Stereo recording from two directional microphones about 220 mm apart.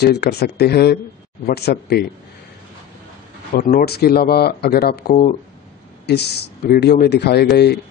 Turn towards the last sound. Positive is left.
turn(degrees=50)  # may be behind; listen again after turning